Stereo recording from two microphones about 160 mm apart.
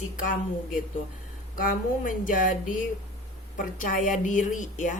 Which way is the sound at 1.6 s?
60° left (ahead or behind).